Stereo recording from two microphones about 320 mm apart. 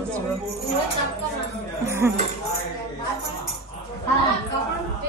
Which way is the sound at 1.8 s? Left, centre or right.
Centre.